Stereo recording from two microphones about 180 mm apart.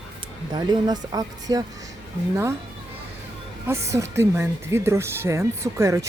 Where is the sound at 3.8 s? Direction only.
15° right (ahead or behind).